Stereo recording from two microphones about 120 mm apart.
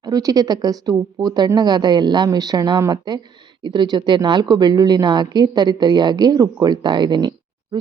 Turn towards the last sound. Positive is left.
turn(degrees=-35)  # may be behind; listen again after turning